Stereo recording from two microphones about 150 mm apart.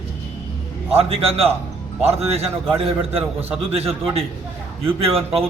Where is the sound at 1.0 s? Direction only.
40° right (ahead or behind).